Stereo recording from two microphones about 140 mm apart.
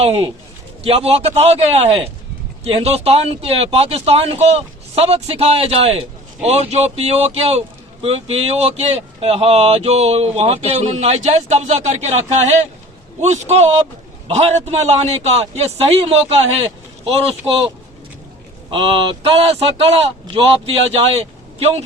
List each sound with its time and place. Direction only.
0.0 s speech: 45° right (ahead or behind)
18.7 s a man's voice: 35° right (ahead or behind)